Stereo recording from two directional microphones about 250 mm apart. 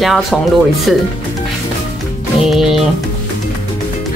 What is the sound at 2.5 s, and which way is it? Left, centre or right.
Speech, centre.